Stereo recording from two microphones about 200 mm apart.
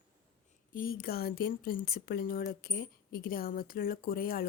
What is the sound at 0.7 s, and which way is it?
Speech, 45° left (ahead or behind).